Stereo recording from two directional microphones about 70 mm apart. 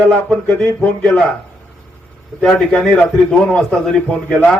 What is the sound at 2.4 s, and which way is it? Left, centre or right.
A man's voice, centre.